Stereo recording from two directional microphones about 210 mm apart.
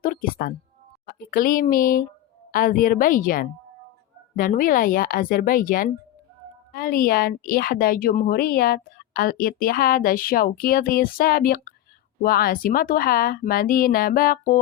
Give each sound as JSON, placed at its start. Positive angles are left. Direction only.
{"t": 0.0, "sound": "music", "side_deg": 40}
{"t": 1.0, "sound": "a woman's voice", "side_deg": 45}